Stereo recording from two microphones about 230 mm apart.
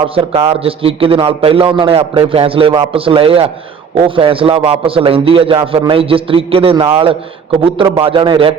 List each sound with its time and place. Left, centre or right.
0.3 s a man's voice: right